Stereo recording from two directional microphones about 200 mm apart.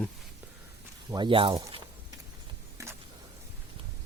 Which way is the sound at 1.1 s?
25° right (ahead or behind).